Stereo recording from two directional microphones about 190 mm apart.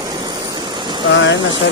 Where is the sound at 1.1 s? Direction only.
75° left (ahead or behind).